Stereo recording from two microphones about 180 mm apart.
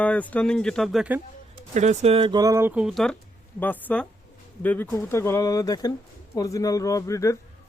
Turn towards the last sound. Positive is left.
turn(degrees=15)  # may be behind; listen again after turning